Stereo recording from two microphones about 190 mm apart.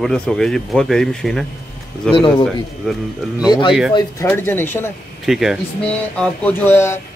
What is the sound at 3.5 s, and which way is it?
Speech, 25° left (ahead or behind).